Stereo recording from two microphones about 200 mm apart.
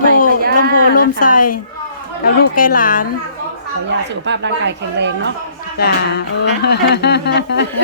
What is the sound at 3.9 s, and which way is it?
A woman's voice, 60° right (ahead or behind).